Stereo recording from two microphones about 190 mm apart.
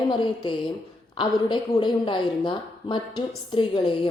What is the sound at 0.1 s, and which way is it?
Speech, 25° left (ahead or behind).